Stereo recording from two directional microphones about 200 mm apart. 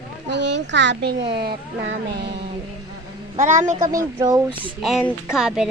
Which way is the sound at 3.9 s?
15° right (ahead or behind).